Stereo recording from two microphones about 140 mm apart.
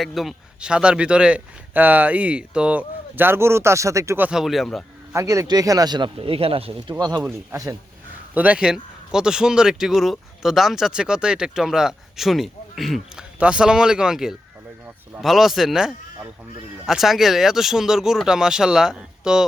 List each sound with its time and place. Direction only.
0.0 s speech: centre (ahead or behind); by 4.3 s 20° right (ahead or behind)
4.3 s speech: 5° right (ahead or behind)
5.1 s speech: 20° right (ahead or behind)
6.1 s speech: 45° right (ahead or behind)
7.2 s speech: 20° right (ahead or behind)
8.4 s speech: 10° right (ahead or behind)